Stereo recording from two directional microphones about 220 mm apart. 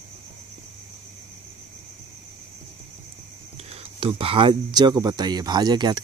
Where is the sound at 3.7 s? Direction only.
25° right (ahead or behind).